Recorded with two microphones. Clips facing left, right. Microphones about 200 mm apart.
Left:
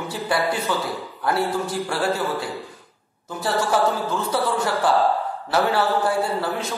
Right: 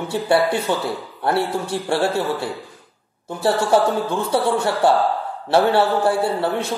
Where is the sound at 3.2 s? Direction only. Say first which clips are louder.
Right 4 dB; 30° right (ahead or behind).